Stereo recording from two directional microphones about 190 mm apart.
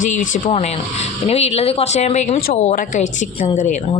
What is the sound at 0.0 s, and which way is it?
Speech, 40° left (ahead or behind).